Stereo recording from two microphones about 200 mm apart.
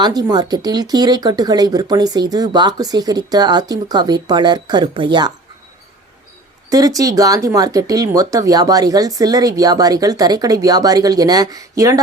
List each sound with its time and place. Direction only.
0.0 s speech: 20° right (ahead or behind)
6.7 s speech: 15° right (ahead or behind)